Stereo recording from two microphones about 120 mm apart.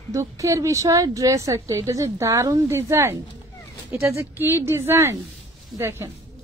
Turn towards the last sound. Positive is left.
turn(degrees=-20)  # may be behind; listen again after turning